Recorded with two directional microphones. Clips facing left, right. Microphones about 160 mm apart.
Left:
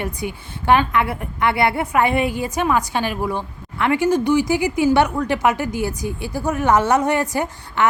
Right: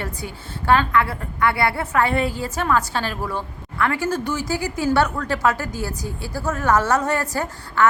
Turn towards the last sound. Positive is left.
turn(degrees=20)  # may be behind; listen again after turning